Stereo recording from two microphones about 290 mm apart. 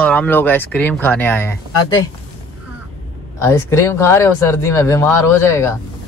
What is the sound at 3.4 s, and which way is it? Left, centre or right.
Speech, centre.